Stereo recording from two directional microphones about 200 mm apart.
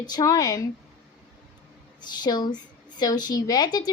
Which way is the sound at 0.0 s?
20° left (ahead or behind).